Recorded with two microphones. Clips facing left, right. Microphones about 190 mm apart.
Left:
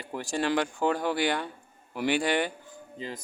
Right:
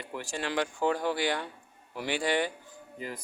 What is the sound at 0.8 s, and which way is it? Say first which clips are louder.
Speech: even; 60° left (ahead or behind).